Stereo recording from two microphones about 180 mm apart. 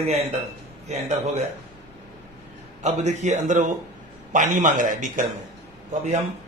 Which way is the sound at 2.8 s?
40° right (ahead or behind).